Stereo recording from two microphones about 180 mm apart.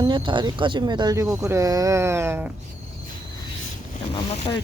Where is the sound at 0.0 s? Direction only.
25° right (ahead or behind).